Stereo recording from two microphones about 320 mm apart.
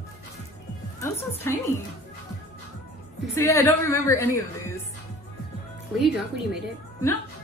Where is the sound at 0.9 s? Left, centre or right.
Centre.